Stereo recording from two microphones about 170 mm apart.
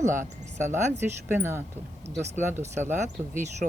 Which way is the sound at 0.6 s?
15° right (ahead or behind).